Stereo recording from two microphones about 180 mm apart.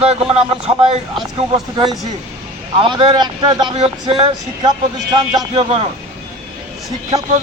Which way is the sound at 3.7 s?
35° right (ahead or behind).